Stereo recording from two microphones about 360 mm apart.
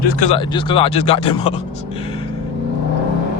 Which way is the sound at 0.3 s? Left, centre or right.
Centre.